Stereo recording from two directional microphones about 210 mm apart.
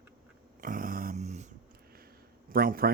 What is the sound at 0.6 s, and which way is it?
Dog, 40° right (ahead or behind).